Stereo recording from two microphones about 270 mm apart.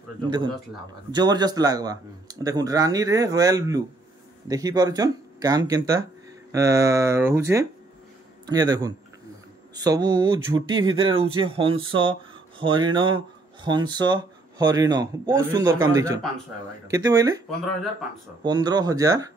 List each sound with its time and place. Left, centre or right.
1.1 s speech: centre
18.4 s speech: centre